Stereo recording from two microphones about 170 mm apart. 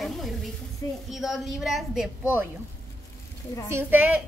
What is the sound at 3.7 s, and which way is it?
Speech, 15° right (ahead or behind).